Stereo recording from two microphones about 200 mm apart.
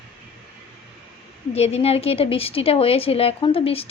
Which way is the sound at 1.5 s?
30° left (ahead or behind).